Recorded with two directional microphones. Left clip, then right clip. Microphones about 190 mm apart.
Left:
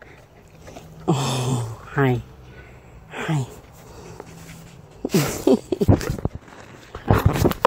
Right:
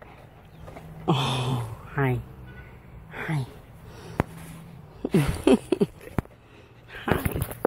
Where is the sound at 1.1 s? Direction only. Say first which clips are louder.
Left 2 dB; 30° left (ahead or behind).